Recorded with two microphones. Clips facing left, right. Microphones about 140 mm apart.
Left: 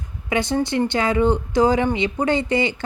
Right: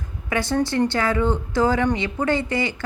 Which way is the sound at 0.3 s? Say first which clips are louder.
Left 1 dB; 20° left (ahead or behind).